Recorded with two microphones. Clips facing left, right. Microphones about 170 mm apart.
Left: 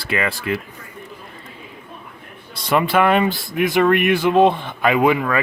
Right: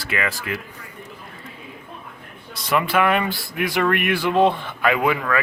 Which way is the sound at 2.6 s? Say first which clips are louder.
Left 3 dB; 30° left (ahead or behind).